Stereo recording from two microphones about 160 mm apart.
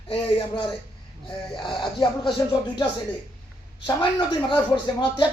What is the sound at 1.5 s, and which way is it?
Speech, 30° left (ahead or behind).